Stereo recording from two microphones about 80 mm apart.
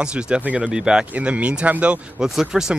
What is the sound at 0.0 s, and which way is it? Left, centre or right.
Speech, centre.